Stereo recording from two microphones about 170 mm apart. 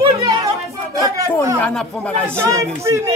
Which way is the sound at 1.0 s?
20° right (ahead or behind).